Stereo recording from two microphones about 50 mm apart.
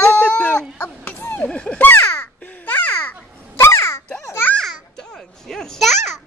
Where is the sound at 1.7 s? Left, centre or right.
Left.